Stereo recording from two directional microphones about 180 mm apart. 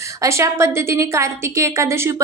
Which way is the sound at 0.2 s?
15° right (ahead or behind).